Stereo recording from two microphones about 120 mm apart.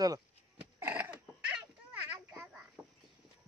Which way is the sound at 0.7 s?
20° right (ahead or behind).